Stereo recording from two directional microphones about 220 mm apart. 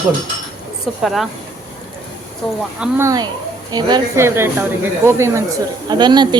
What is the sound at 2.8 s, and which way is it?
A woman's voice, 15° right (ahead or behind).